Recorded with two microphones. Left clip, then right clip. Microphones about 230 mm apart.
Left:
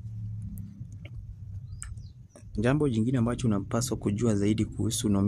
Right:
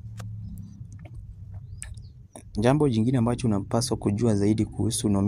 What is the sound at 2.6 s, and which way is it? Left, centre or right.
Speech, centre.